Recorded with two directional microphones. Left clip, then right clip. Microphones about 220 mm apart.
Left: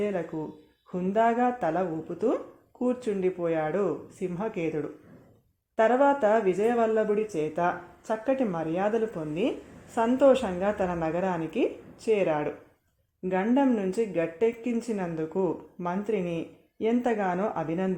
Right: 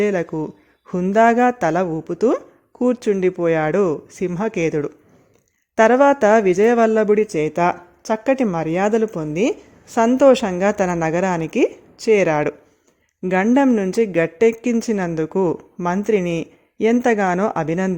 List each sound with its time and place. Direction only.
0.0 s speech: 45° right (ahead or behind)